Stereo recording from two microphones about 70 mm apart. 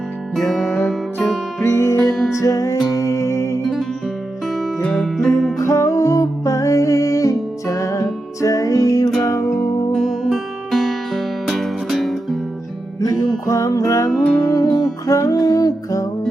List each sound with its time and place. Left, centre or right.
0.5 s music: left
1.6 s music: left
2.0 s music: centre
2.3 s music: left
3.6 s music: centre
5.5 s music: left
9.9 s music: centre
13.0 s music: left
15.0 s music: left